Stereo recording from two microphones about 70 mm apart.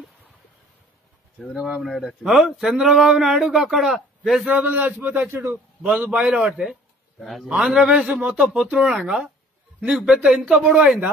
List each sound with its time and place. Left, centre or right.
1.4 s speech: centre
4.5 s a man's voice: right
6.1 s speech: centre